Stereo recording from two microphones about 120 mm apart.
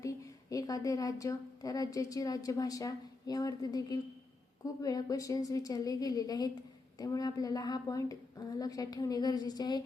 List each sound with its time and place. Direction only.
0.5 s a woman's voice: 30° left (ahead or behind)